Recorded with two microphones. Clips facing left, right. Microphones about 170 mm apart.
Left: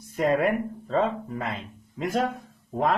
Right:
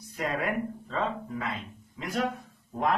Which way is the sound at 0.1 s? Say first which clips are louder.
Left 7 dB; 50° left (ahead or behind).